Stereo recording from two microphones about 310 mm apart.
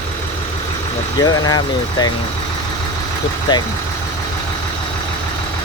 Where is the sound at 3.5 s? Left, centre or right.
Centre.